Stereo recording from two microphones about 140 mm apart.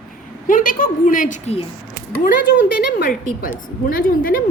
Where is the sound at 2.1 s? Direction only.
90° left.